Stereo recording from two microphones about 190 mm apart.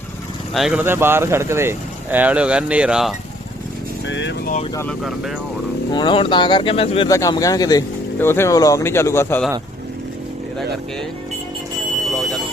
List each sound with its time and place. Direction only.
0.5 s speech: centre (ahead or behind)
4.0 s speech: 70° left (ahead or behind)
4.9 s speech: centre (ahead or behind)
5.9 s speech: 25° left (ahead or behind)
7.1 s speech: 20° left (ahead or behind)
12.0 s a sound: centre (ahead or behind)